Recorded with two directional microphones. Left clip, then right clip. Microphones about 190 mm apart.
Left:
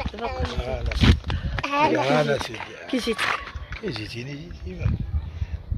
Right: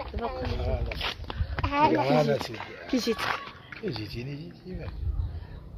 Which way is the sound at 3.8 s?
20° left (ahead or behind).